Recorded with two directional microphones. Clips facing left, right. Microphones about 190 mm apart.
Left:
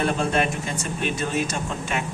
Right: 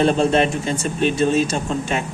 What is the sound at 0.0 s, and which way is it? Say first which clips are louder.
A man's voice: right 6 dB; 25° right (ahead or behind).